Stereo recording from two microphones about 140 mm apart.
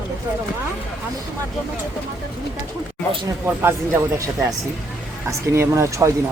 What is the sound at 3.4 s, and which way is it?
Speech, 15° right (ahead or behind).